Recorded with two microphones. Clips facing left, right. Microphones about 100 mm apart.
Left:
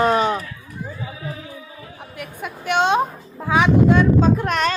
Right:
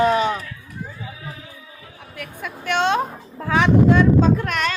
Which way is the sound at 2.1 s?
15° left (ahead or behind).